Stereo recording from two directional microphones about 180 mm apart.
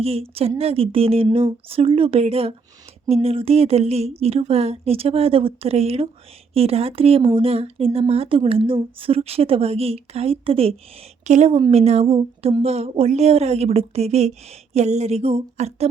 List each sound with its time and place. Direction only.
0.0 s speech: 35° right (ahead or behind)